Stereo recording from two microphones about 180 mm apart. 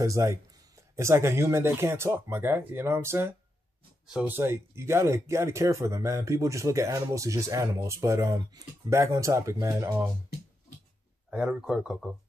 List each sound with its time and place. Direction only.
0.0 s speech: 15° right (ahead or behind)
11.2 s speech: 5° right (ahead or behind)